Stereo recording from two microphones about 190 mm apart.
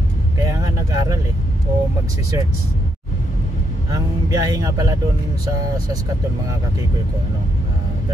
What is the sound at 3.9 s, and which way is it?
Speech, 20° right (ahead or behind).